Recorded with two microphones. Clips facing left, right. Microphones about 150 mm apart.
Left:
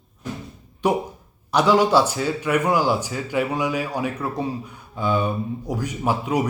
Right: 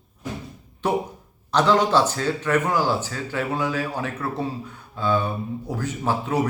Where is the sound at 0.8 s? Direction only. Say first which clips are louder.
Left 2 dB; 10° left (ahead or behind).